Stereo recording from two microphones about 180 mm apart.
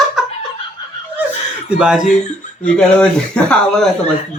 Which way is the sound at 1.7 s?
5° right (ahead or behind).